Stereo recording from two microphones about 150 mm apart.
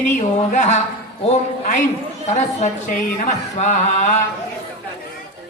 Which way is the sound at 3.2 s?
55° left (ahead or behind).